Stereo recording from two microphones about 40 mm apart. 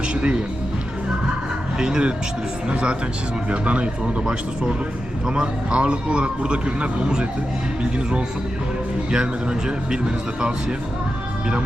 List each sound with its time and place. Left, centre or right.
0.1 s music: right
1.8 s a man's voice: right
3.5 s a man's voice: right
5.3 s a man's voice: right
9.0 s a man's voice: right